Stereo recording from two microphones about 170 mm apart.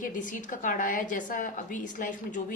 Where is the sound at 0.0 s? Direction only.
50° left (ahead or behind).